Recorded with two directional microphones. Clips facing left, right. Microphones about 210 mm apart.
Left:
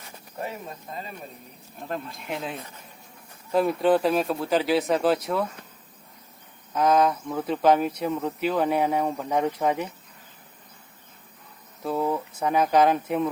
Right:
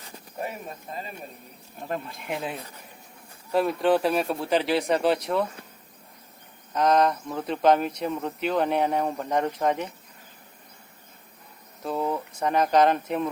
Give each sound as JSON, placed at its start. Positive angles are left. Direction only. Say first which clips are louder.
{"t": 1.9, "sound": "speech", "louder": "right 1 dB", "side_deg": -5}
{"t": 6.7, "sound": "speech", "louder": "even", "side_deg": 5}
{"t": 11.8, "sound": "speech", "louder": "left 2 dB", "side_deg": 5}